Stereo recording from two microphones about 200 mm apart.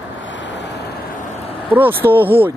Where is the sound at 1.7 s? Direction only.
10° right (ahead or behind).